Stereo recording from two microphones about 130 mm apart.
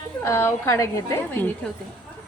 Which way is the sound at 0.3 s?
20° left (ahead or behind).